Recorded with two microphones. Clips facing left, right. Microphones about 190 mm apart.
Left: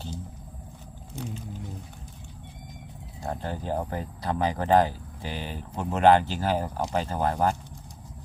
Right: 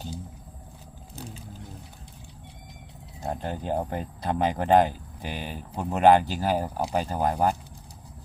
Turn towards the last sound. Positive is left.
turn(degrees=-15)  # may be behind; listen again after turning